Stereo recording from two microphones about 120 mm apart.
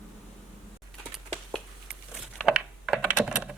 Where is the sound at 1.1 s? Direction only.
Centre (ahead or behind).